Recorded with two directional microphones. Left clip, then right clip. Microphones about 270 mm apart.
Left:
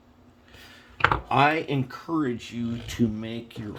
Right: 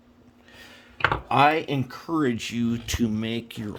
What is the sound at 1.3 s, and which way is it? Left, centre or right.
Speech, right.